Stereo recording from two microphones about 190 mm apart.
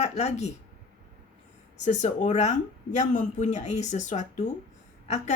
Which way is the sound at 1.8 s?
40° left (ahead or behind).